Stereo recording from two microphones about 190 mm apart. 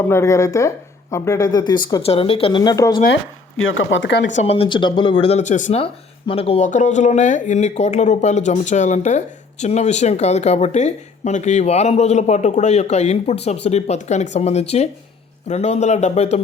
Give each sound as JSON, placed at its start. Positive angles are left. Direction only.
{"t": 0.1, "sound": "speech", "side_deg": 15}
{"t": 3.6, "sound": "speech", "side_deg": 90}
{"t": 4.3, "sound": "speech", "side_deg": 35}